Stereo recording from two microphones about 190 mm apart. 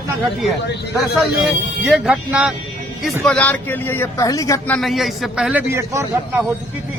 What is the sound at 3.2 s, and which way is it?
Speech, 5° left (ahead or behind).